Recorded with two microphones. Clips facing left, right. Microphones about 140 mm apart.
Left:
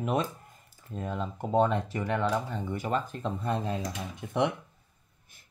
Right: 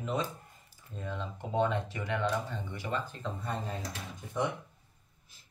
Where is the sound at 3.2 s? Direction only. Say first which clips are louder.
Left 6 dB; 75° left (ahead or behind).